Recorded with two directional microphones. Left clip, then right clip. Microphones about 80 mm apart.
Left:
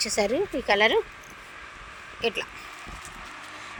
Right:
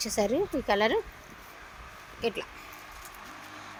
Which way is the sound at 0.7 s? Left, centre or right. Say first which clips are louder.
Left 5 dB; left.